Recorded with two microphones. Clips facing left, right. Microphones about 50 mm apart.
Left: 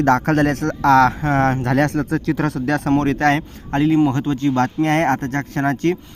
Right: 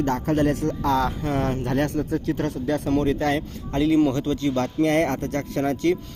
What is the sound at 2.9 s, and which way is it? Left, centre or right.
Speech, left.